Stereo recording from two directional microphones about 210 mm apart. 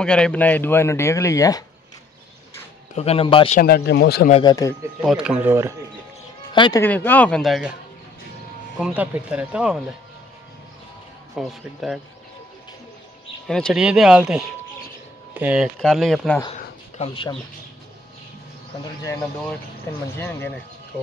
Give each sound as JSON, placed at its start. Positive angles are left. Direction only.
{"t": 0.0, "sound": "speech", "side_deg": 5}
{"t": 2.9, "sound": "speech", "side_deg": 30}
{"t": 3.5, "sound": "speech", "side_deg": 45}
{"t": 4.3, "sound": "speech", "side_deg": 20}
{"t": 5.0, "sound": "speech", "side_deg": -5}
{"t": 6.5, "sound": "speech", "side_deg": 20}
{"t": 6.8, "sound": "speech", "side_deg": 10}
{"t": 8.7, "sound": "speech", "side_deg": -5}
{"t": 11.3, "sound": "speech", "side_deg": 0}
{"t": 13.5, "sound": "speech", "side_deg": 5}
{"t": 17.1, "sound": "speech", "side_deg": 25}
{"t": 20.2, "sound": "speech", "side_deg": 10}